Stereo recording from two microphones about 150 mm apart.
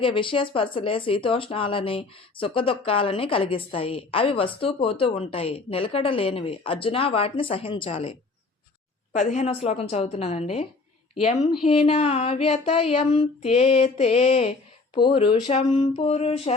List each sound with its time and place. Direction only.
0.0 s speech: 35° left (ahead or behind)
9.1 s female singing: 50° left (ahead or behind)
11.9 s female singing: 45° left (ahead or behind)
14.9 s speech: 35° left (ahead or behind)